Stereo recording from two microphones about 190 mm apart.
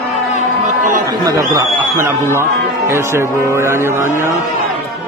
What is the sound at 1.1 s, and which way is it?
A man's voice, 20° right (ahead or behind).